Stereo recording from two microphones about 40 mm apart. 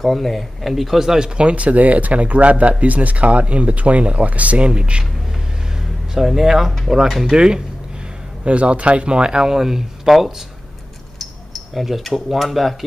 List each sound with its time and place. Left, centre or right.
0.0 s speech: centre; by 5.0 s right
6.1 s speech: centre
7.3 s speech: centre
8.5 s speech: right; by 10.3 s centre
11.7 s speech: centre